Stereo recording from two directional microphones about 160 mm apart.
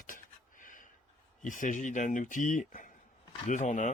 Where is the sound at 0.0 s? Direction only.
60° left (ahead or behind).